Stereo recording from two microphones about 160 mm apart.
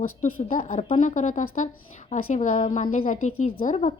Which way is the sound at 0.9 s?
50° left (ahead or behind).